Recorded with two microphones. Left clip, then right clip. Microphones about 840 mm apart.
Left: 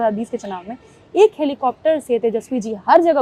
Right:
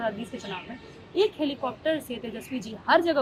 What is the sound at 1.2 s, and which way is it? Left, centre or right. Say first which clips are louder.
A woman's voice: left 11 dB; left.